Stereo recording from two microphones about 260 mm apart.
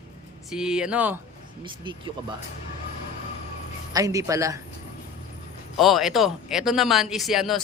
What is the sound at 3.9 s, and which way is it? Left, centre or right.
Speech, centre.